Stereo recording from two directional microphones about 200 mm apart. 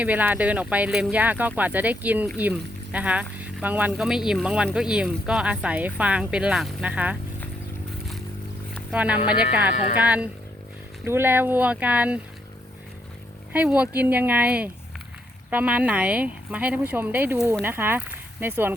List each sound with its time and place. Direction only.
0.0 s speech: 10° right (ahead or behind)
8.9 s speech: 5° right (ahead or behind)
13.5 s speech: 5° right (ahead or behind)